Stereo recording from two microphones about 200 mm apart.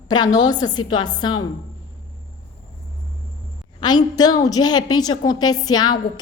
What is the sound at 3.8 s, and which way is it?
A woman's voice, 20° left (ahead or behind).